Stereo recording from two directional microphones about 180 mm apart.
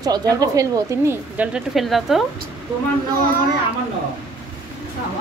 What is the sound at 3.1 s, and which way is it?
Speech, 50° right (ahead or behind).